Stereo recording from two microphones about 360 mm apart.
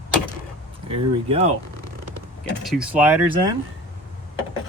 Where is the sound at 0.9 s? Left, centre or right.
Centre.